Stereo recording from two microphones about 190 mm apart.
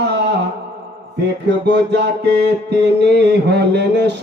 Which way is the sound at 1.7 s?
65° right (ahead or behind).